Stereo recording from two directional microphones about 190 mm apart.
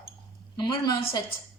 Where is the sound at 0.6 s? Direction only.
25° left (ahead or behind).